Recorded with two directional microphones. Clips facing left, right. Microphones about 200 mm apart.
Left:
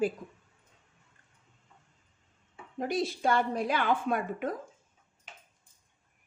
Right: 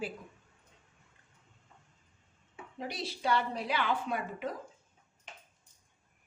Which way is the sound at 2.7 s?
50° left (ahead or behind).